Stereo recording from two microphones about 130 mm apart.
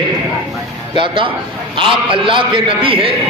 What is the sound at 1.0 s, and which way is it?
A man's voice, 40° right (ahead or behind).